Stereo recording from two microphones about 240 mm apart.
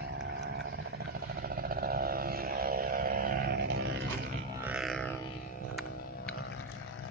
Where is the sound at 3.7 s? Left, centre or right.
Right.